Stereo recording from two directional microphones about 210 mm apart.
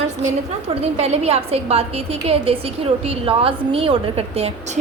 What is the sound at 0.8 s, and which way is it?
A woman's voice, 30° right (ahead or behind).